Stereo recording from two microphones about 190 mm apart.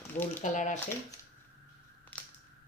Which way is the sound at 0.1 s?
40° left (ahead or behind).